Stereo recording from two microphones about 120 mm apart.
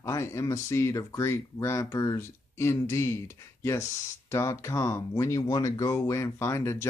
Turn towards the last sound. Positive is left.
turn(degrees=25)  # may be behind; listen again after turning